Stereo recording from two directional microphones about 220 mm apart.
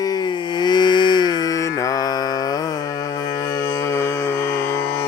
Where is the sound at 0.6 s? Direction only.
20° left (ahead or behind).